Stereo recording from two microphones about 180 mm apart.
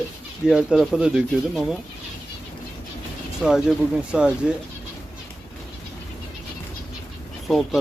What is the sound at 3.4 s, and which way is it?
Speech, 5° right (ahead or behind).